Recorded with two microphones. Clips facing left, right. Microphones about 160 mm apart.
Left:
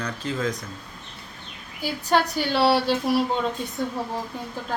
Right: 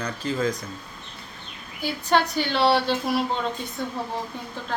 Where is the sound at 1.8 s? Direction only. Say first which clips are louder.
Even; 5° left (ahead or behind).